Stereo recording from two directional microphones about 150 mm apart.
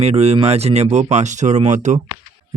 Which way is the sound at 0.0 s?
45° right (ahead or behind).